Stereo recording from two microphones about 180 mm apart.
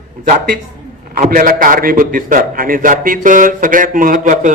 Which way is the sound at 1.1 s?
55° right (ahead or behind).